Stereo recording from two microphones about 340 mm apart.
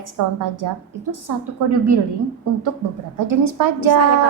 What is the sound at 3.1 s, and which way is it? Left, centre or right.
Speech, right.